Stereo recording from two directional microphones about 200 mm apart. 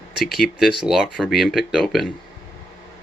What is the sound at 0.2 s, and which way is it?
Speech, 50° left (ahead or behind).